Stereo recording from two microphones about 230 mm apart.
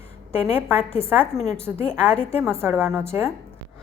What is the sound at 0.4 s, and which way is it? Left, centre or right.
Speech, left.